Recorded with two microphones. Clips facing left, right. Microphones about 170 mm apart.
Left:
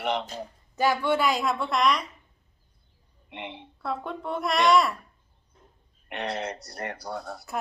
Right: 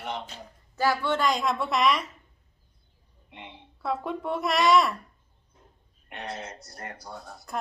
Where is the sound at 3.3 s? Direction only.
80° left.